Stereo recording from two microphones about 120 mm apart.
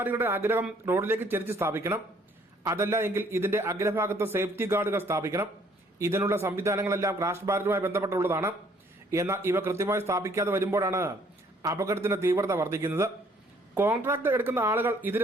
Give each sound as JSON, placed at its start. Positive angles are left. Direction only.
{"t": 0.0, "sound": "a man's voice", "side_deg": -15}